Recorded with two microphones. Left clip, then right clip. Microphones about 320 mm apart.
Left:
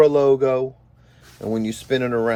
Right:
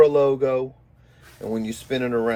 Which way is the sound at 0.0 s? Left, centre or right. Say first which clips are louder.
Left 1 dB; left.